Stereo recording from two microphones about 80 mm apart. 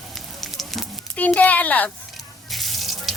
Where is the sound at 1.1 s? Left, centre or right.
Centre.